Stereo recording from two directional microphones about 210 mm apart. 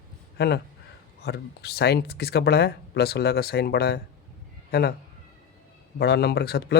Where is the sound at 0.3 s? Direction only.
50° left (ahead or behind).